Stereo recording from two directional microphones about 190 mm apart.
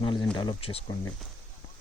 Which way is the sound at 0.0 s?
25° left (ahead or behind).